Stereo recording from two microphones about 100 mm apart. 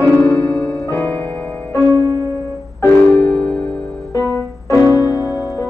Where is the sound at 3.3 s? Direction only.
15° left (ahead or behind).